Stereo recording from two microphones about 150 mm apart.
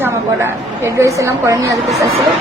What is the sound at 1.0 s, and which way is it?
Speech, 20° right (ahead or behind).